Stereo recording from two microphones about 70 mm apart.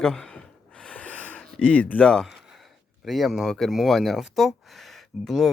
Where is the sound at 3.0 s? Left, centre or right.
Centre.